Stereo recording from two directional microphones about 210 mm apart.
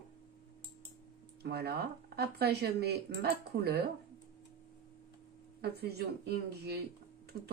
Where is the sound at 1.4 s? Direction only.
50° right (ahead or behind).